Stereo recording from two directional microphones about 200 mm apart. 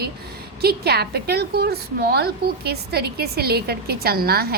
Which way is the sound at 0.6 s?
55° right (ahead or behind).